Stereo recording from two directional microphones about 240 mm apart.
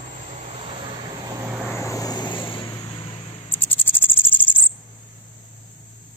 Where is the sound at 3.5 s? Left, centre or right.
Centre.